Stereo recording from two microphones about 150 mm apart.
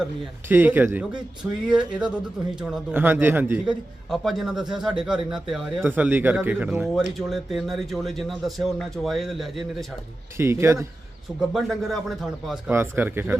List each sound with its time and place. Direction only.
0.4 s a man's voice: 15° right (ahead or behind)
4.1 s a man's voice: centre (ahead or behind)
6.9 s speech: centre (ahead or behind)
10.3 s a man's voice: 15° right (ahead or behind)
11.3 s speech: centre (ahead or behind)
12.7 s a man's voice: 15° right (ahead or behind)